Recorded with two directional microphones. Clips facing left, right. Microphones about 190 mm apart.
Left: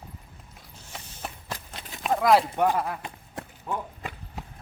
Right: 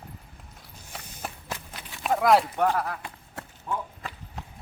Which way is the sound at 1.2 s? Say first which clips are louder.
Right 1 dB; 5° right (ahead or behind).